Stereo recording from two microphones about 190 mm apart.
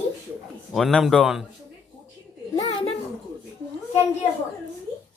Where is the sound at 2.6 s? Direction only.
30° left (ahead or behind).